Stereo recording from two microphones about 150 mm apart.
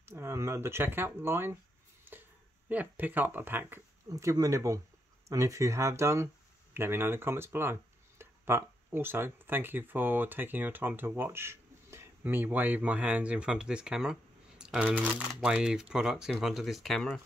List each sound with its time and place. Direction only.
0.0 s speech: 15° right (ahead or behind)
2.7 s speech: 10° right (ahead or behind)